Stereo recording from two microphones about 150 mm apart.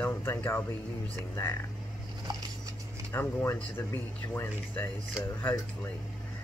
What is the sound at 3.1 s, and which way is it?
Speech, 15° left (ahead or behind).